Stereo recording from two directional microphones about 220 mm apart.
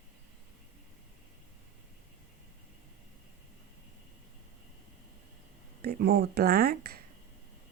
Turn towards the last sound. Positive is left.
turn(degrees=-45)  # may be behind; listen again after turning